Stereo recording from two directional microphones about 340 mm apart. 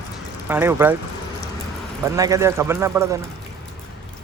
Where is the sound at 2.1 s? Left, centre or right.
Centre.